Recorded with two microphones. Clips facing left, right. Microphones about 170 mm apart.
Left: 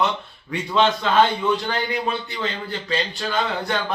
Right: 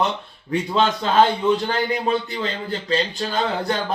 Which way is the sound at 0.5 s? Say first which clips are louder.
Even; 35° right (ahead or behind).